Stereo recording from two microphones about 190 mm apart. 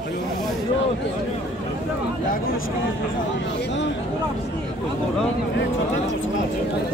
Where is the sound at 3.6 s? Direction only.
65° left (ahead or behind).